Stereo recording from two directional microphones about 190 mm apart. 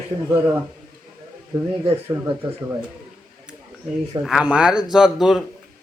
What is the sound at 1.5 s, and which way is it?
Speech, 20° right (ahead or behind).